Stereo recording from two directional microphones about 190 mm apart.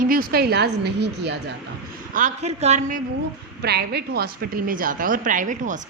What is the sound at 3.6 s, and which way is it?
A woman's voice, 60° right (ahead or behind).